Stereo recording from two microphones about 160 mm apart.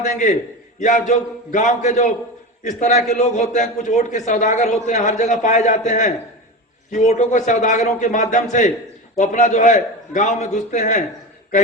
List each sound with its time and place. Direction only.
0.0 s a man's voice: 50° left (ahead or behind)